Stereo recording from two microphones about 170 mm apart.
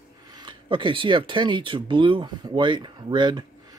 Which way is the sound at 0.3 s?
25° right (ahead or behind).